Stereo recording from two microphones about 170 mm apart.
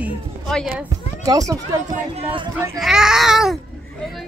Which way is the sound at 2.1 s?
35° right (ahead or behind).